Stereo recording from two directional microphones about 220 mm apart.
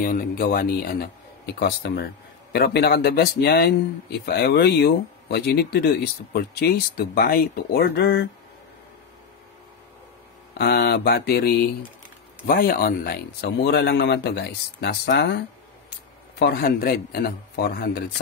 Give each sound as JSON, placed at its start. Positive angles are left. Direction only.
{"t": 0.0, "sound": "speech", "side_deg": 40}
{"t": 10.6, "sound": "speech", "side_deg": 45}